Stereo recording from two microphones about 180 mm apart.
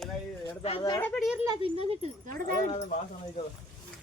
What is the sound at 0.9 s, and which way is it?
Speech, 10° left (ahead or behind).